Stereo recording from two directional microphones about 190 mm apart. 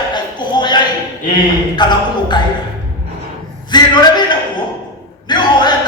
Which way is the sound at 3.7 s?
20° left (ahead or behind).